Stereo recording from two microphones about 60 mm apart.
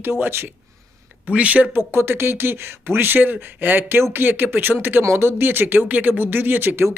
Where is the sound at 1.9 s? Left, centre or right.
Right.